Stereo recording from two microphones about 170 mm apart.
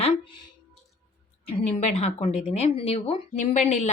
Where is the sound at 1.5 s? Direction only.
40° left (ahead or behind).